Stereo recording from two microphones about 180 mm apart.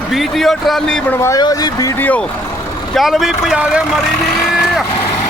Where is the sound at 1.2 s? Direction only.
20° left (ahead or behind); by 3.8 s 5° right (ahead or behind).